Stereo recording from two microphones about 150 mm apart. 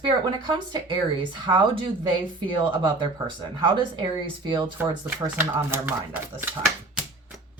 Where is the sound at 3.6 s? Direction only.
30° right (ahead or behind).